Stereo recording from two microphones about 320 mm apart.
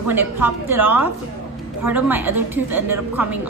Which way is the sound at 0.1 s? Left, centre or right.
Centre.